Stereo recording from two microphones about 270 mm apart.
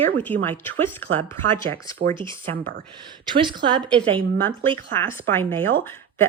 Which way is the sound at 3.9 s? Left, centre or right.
Centre.